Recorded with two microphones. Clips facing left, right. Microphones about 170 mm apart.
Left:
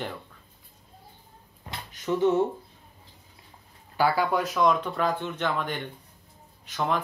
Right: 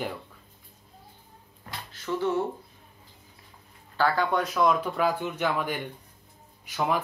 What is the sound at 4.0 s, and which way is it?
Speech, 10° left (ahead or behind).